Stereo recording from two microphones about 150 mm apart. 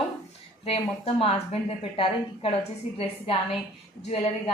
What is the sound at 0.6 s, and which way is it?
Speech, 40° left (ahead or behind).